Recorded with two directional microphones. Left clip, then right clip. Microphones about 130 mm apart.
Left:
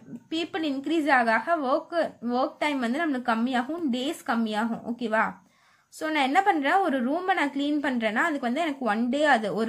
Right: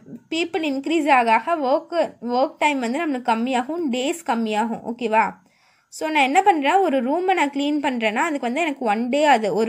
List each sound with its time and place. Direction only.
0.3 s a woman's voice: 35° right (ahead or behind)